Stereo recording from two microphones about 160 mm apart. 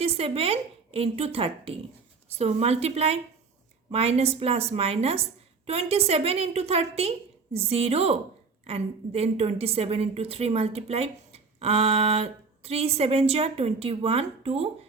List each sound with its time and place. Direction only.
0.0 s a woman's voice: 40° right (ahead or behind)